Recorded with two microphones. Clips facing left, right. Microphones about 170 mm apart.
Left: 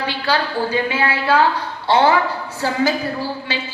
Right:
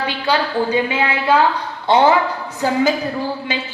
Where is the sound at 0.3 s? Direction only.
20° right (ahead or behind).